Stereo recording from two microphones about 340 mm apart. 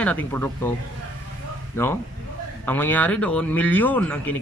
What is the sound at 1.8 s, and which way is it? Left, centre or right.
Speech, centre.